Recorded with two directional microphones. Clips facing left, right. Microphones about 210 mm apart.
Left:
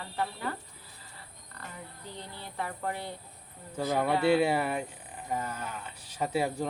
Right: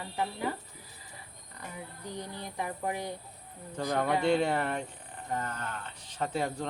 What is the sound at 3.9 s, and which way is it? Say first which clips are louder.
Speech: left 2 dB; 10° left (ahead or behind).